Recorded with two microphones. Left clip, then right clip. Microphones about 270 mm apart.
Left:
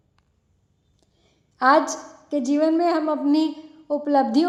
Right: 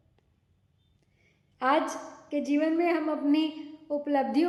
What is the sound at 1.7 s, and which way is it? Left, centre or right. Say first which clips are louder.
A woman's voice: left 8 dB; left.